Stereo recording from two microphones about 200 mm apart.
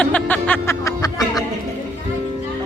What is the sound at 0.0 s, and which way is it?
Music, 5° left (ahead or behind).